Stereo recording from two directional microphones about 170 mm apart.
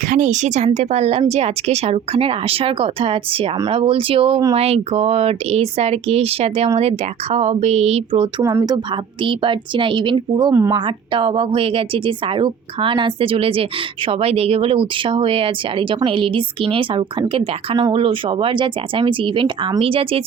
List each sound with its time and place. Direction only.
0.1 s speech: 45° right (ahead or behind); by 10.8 s 20° right (ahead or behind)
10.8 s speech: 30° right (ahead or behind)